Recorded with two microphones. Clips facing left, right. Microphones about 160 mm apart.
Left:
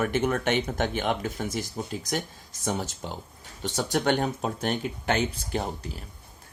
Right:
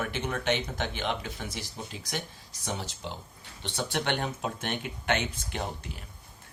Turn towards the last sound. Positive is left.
turn(degrees=35)  # may be behind; listen again after turning